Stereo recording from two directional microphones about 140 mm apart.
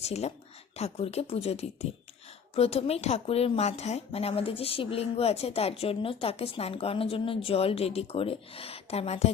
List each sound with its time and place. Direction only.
0.0 s speech: 50° left (ahead or behind)